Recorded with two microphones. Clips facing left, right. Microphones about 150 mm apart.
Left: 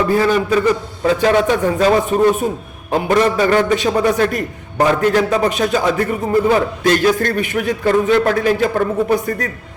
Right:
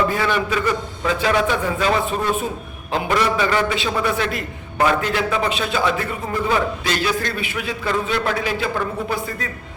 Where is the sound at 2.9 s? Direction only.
45° left (ahead or behind).